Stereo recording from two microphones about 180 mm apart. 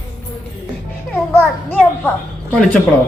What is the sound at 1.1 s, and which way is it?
Children playing, 10° left (ahead or behind).